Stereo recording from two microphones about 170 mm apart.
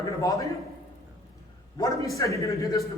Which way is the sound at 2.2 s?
20° left (ahead or behind).